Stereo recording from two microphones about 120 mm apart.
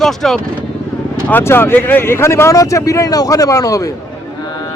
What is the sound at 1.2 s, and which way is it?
Speech, 15° left (ahead or behind).